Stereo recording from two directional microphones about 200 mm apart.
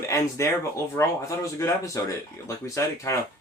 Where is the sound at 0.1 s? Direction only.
15° left (ahead or behind).